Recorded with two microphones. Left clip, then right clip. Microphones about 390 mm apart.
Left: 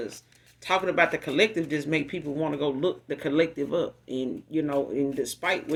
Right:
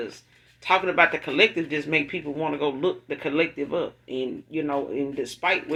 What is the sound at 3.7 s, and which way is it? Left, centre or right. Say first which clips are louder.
Speech: even; left.